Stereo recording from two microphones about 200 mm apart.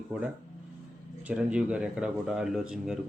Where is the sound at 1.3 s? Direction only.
5° right (ahead or behind).